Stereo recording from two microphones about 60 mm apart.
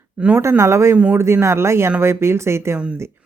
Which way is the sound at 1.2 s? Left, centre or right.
Right.